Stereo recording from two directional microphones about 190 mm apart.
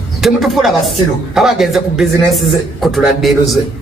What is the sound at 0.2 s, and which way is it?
Speech, centre (ahead or behind).